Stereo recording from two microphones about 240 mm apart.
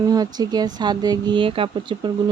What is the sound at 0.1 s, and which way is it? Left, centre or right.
Speech, centre.